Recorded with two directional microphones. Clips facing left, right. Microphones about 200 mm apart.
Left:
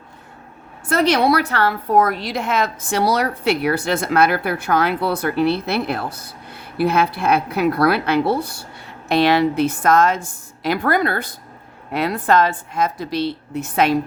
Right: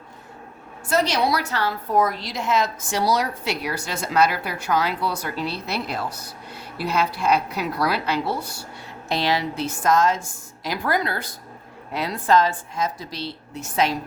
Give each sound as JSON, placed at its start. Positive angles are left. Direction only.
{"t": 0.9, "sound": "a woman's voice", "side_deg": 60}